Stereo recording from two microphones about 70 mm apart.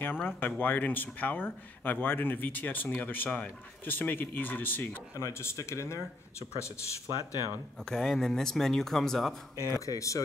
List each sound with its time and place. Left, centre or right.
0.0 s speech: left
5.1 s speech: left
7.8 s speech: centre
9.6 s speech: left